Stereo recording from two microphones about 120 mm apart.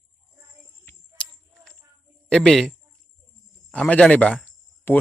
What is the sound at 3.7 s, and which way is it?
Speech, 5° left (ahead or behind).